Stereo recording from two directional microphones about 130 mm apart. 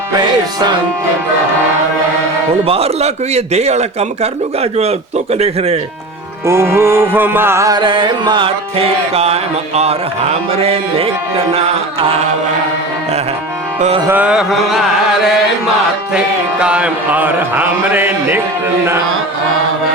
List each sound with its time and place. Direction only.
2.6 s a man's voice: 50° right (ahead or behind)
6.4 s music: 20° right (ahead or behind); by 10.0 s 55° right (ahead or behind)
10.5 s a man's voice: 50° right (ahead or behind)
14.1 s a man's voice: 10° right (ahead or behind)
16.1 s music: 10° right (ahead or behind)